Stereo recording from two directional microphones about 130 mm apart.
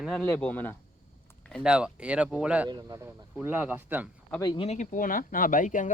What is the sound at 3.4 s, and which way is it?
Speech, 15° right (ahead or behind).